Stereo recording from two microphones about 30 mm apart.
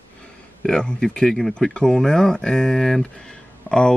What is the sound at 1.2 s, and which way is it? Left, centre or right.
Speech, centre.